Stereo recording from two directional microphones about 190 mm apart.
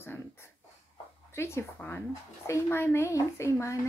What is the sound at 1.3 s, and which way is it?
A woman's voice, 15° left (ahead or behind).